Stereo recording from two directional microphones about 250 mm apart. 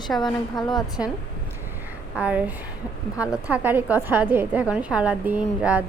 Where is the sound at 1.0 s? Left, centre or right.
Centre.